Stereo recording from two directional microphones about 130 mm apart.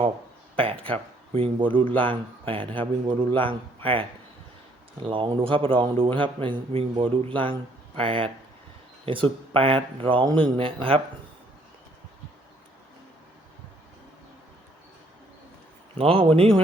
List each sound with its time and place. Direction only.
0.5 s a man's voice: 45° right (ahead or behind)
5.0 s a man's voice: 40° right (ahead or behind)
16.0 s speech: 45° right (ahead or behind)